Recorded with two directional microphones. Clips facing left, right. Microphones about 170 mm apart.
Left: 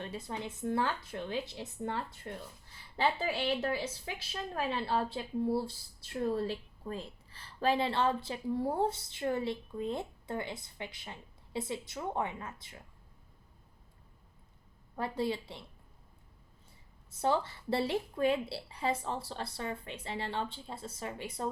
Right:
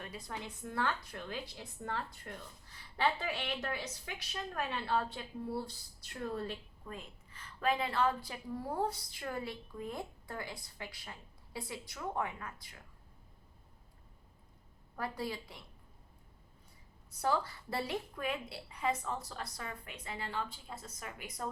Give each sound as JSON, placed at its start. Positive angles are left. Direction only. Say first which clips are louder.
{"t": 0.0, "sound": "speech", "louder": "left 5 dB", "side_deg": 25}
{"t": 14.9, "sound": "speech", "louder": "left 5 dB", "side_deg": 25}
{"t": 17.1, "sound": "speech", "louder": "left 3 dB", "side_deg": 25}